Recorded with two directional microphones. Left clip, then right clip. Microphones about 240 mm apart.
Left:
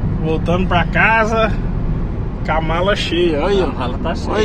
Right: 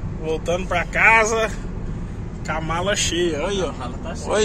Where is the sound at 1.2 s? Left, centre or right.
Right.